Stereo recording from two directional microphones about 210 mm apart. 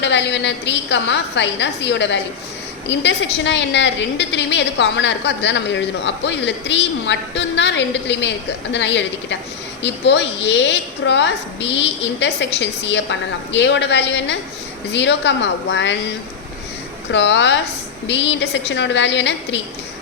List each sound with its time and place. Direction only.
0.0 s a woman's voice: 55° left (ahead or behind)
17.1 s a woman's voice: 55° left (ahead or behind)